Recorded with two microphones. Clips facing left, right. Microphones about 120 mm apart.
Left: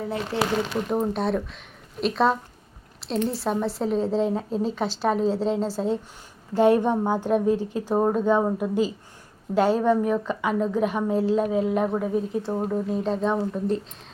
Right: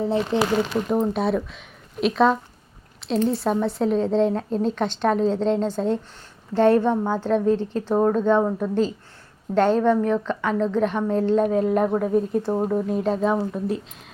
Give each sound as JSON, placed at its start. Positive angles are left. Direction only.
{"t": 0.3, "sound": "speech", "side_deg": -20}
{"t": 0.9, "sound": "a woman's voice", "side_deg": 0}
{"t": 12.5, "sound": "speech", "side_deg": -15}
{"t": 12.9, "sound": "speech", "side_deg": 0}